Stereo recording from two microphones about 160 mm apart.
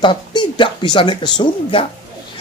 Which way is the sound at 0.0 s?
30° left (ahead or behind).